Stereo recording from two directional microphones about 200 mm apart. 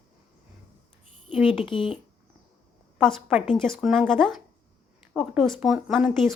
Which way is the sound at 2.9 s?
Centre (ahead or behind).